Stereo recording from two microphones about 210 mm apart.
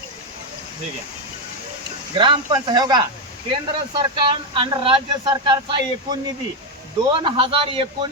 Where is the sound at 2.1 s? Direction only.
25° right (ahead or behind).